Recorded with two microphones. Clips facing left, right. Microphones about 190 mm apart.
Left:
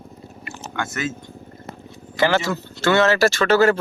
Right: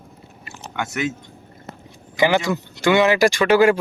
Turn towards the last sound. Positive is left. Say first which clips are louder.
# right 1 dB
turn(degrees=-15)  # may be behind; listen again after turning